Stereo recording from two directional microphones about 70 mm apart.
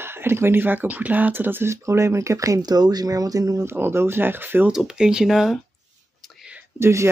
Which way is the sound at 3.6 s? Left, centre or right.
Right.